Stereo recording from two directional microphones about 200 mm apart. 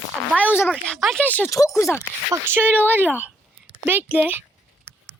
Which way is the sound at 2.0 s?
10° right (ahead or behind).